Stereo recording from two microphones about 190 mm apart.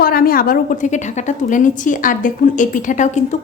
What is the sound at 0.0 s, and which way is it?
A woman's voice, 50° left (ahead or behind).